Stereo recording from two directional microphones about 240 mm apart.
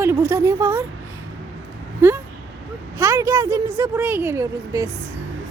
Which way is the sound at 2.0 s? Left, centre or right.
Centre.